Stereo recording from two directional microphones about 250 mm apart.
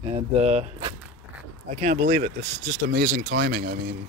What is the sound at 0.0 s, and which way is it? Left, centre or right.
Speech, right.